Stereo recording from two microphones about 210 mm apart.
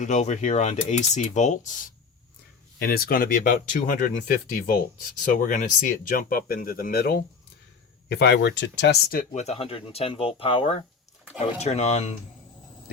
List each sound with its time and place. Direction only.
0.0 s speech: 35° left (ahead or behind)
2.7 s speech: 45° left (ahead or behind)
9.3 s speech: 30° left (ahead or behind)